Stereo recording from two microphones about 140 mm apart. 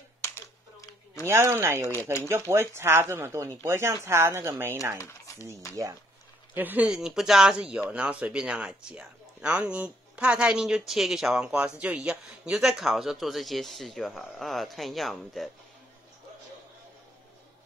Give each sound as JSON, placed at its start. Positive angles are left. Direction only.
{"t": 0.2, "sound": "a sound", "side_deg": 20}
{"t": 1.2, "sound": "speech", "side_deg": -20}
{"t": 1.8, "sound": "speech", "side_deg": 15}
{"t": 2.2, "sound": "speech", "side_deg": -20}
{"t": 4.9, "sound": "speech", "side_deg": 25}
{"t": 6.5, "sound": "speech", "side_deg": -15}